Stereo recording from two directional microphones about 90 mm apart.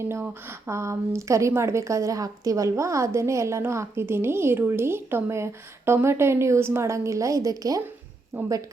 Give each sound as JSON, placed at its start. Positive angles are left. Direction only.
{"t": 0.0, "sound": "a woman's voice", "side_deg": -30}
{"t": 8.3, "sound": "speech", "side_deg": -25}